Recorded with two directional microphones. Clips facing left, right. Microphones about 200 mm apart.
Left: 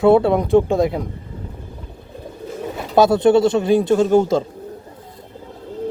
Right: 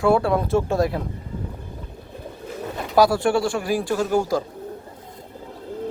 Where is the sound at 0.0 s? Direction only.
20° left (ahead or behind).